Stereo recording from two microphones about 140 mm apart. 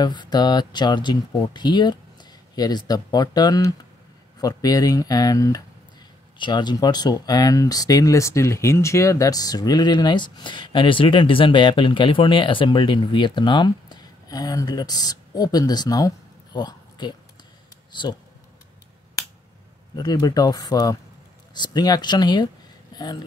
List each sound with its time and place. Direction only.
0.0 s speech: 30° left (ahead or behind)
20.0 s speech: 30° left (ahead or behind)